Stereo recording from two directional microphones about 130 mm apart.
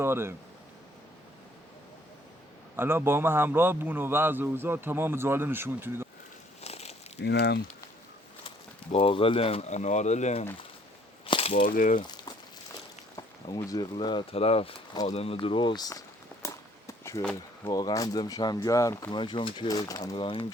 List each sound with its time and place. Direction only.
0.0 s speech: 20° right (ahead or behind)
2.7 s a man's voice: 20° right (ahead or behind)
6.6 s a sound: 55° left (ahead or behind)
8.4 s speech: 45° left (ahead or behind); by 10.4 s 60° left (ahead or behind)
11.3 s a sound: 45° left (ahead or behind)
11.6 s speech: 90° left
12.0 s a sound: 35° left (ahead or behind)
13.7 s speech: 35° left (ahead or behind)
15.1 s walk: 50° left (ahead or behind); by 17.2 s 25° left (ahead or behind)
17.7 s speech: 30° left (ahead or behind)
19.1 s speech: 40° left (ahead or behind)
20.1 s speech: 40° left (ahead or behind)